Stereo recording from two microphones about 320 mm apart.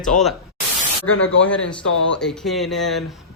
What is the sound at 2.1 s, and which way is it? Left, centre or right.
Speech, centre.